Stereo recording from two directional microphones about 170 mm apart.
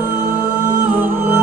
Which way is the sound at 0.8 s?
10° right (ahead or behind).